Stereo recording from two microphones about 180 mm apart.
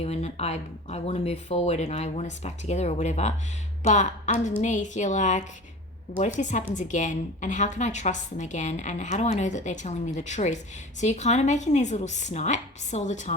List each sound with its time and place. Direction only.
0.0 s a woman's voice: 35° left (ahead or behind)